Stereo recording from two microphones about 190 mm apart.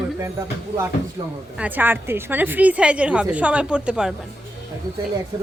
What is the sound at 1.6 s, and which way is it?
A woman's voice, 10° right (ahead or behind).